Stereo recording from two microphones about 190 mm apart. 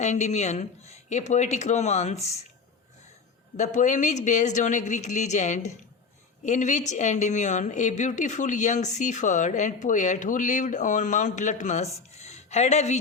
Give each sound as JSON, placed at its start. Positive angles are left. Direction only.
{"t": 0.0, "sound": "a woman's voice", "side_deg": 35}
{"t": 3.6, "sound": "a woman's voice", "side_deg": 40}